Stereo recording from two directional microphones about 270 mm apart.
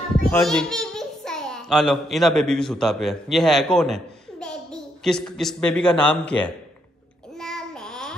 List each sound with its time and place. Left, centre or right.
0.2 s a child's voice: centre
7.3 s child singing: centre